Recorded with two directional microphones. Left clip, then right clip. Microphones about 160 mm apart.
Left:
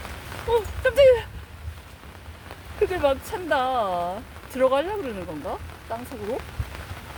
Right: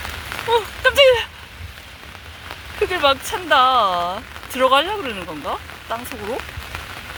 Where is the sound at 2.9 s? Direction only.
5° left (ahead or behind).